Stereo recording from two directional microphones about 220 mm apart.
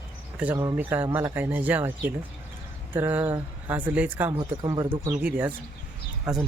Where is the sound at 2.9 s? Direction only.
10° right (ahead or behind).